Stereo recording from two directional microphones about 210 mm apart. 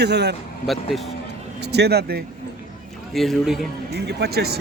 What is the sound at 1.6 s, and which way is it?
Speech, 50° right (ahead or behind).